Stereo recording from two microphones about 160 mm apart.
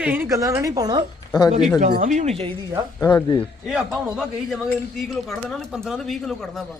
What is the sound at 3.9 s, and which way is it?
Speech, 5° right (ahead or behind).